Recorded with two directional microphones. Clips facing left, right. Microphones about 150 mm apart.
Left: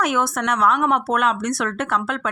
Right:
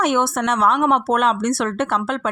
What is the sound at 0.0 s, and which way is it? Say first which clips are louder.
Speech: right 3 dB; 30° right (ahead or behind).